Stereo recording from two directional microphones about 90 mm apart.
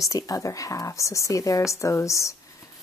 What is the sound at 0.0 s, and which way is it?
A woman's voice, 40° left (ahead or behind).